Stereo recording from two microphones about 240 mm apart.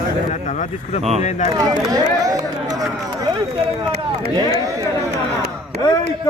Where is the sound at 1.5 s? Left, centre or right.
Centre.